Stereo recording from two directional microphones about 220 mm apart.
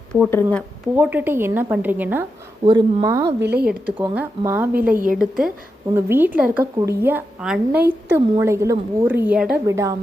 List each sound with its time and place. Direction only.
0.1 s speech: 5° left (ahead or behind)
0.9 s a woman's voice: 5° right (ahead or behind)
3.4 s speech: 45° right (ahead or behind)
3.9 s a woman's voice: 5° right (ahead or behind)